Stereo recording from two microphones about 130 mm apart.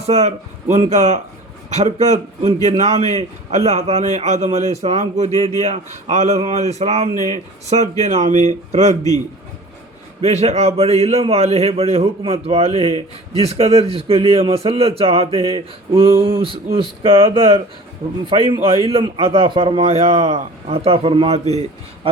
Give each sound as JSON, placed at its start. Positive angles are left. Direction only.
{"t": 0.0, "sound": "a man's voice", "side_deg": -55}
{"t": 10.2, "sound": "a man's voice", "side_deg": -55}